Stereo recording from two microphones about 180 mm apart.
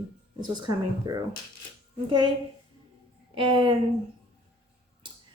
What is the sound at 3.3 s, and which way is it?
Speech, 30° right (ahead or behind).